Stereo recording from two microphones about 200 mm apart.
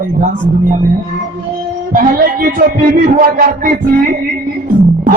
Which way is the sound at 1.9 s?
45° right (ahead or behind).